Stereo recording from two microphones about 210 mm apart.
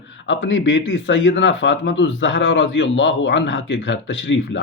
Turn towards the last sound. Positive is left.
turn(degrees=60)  # may be behind; listen again after turning